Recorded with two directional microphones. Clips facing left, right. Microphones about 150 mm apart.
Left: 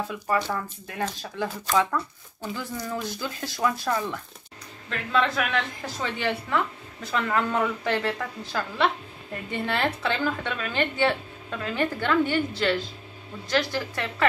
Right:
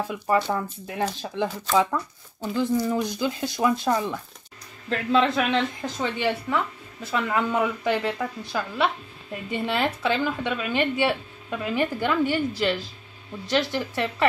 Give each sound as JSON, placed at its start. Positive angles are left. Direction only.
{"t": 0.1, "sound": "a woman's voice", "side_deg": -20}
{"t": 4.8, "sound": "speech", "side_deg": -30}
{"t": 7.1, "sound": "a woman's voice", "side_deg": -10}